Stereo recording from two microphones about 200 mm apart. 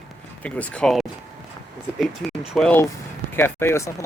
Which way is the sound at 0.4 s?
5° left (ahead or behind).